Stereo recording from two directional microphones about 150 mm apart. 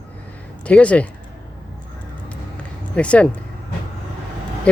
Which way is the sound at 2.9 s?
10° left (ahead or behind).